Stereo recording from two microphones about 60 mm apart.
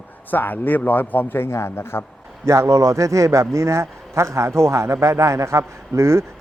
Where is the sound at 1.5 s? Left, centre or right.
Left.